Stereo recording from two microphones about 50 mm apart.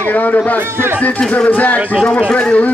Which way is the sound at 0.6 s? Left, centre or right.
Right.